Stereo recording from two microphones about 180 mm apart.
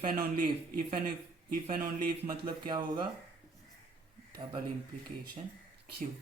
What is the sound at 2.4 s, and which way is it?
Speech, 25° right (ahead or behind).